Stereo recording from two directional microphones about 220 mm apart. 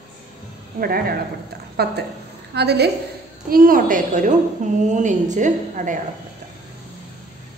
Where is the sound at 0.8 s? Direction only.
45° right (ahead or behind).